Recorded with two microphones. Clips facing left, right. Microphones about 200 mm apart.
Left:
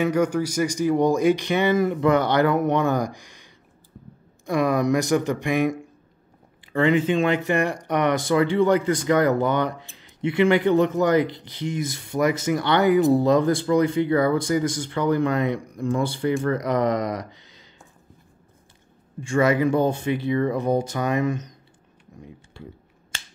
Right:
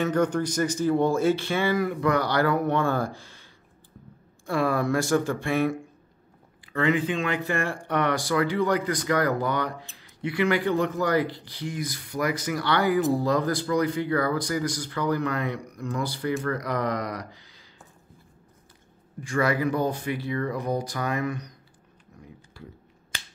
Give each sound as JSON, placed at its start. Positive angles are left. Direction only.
{"t": 0.0, "sound": "speech", "side_deg": 10}
{"t": 4.5, "sound": "speech", "side_deg": 15}
{"t": 6.7, "sound": "speech", "side_deg": 25}
{"t": 19.2, "sound": "speech", "side_deg": 25}
{"t": 22.2, "sound": "a sound", "side_deg": 25}